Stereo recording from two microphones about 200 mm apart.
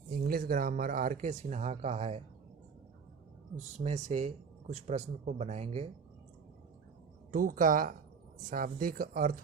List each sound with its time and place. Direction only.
0.1 s speech: 45° right (ahead or behind)
3.8 s speech: 35° right (ahead or behind)
7.3 s speech: 45° right (ahead or behind)